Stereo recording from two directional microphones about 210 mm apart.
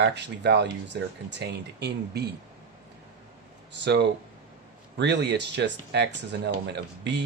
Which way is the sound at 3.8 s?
55° right (ahead or behind).